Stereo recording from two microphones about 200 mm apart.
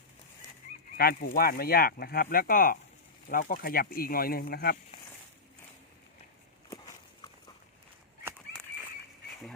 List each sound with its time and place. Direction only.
0.9 s speech: 50° left (ahead or behind)